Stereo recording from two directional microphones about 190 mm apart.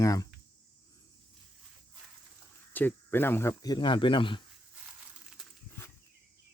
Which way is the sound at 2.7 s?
10° left (ahead or behind).